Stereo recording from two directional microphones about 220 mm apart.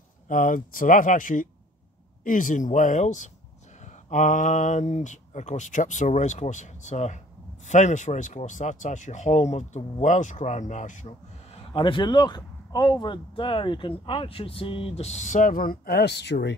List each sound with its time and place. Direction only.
0.3 s speech: 35° left (ahead or behind)